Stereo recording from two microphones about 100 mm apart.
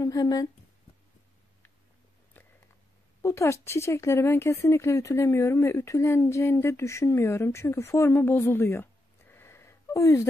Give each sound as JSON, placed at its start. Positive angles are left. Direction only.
{"t": 0.0, "sound": "speech", "side_deg": 40}
{"t": 3.2, "sound": "a woman's voice", "side_deg": 30}
{"t": 9.3, "sound": "a sound", "side_deg": 25}